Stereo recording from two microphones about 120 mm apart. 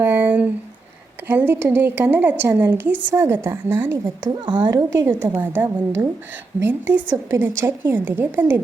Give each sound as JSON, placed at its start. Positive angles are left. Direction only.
{"t": 0.0, "sound": "a sound", "side_deg": -15}
{"t": 1.3, "sound": "a woman's voice", "side_deg": -20}
{"t": 4.0, "sound": "a woman's voice", "side_deg": -30}
{"t": 5.0, "sound": "a woman's voice", "side_deg": -20}